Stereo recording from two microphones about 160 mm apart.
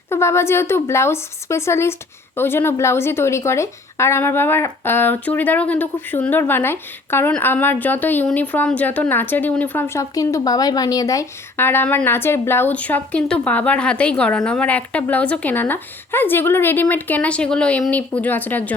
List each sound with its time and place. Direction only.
0.1 s speech: 15° left (ahead or behind)